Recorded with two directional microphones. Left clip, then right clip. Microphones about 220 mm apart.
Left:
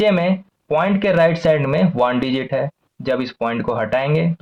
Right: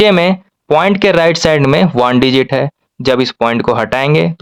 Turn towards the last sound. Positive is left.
turn(degrees=-45)  # may be behind; listen again after turning